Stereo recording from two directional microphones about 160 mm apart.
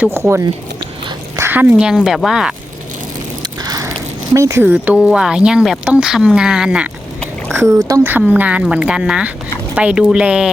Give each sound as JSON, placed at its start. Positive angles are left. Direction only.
{"t": 0.0, "sound": "speech", "side_deg": -15}
{"t": 1.4, "sound": "a sound", "side_deg": -15}
{"t": 1.7, "sound": "speech", "side_deg": 0}
{"t": 3.6, "sound": "biting", "side_deg": -25}
{"t": 4.4, "sound": "speech", "side_deg": -15}
{"t": 7.8, "sound": "a woman's voice", "side_deg": -20}